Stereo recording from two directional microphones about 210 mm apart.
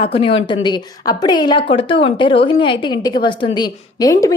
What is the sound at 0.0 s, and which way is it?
Speech, 25° left (ahead or behind).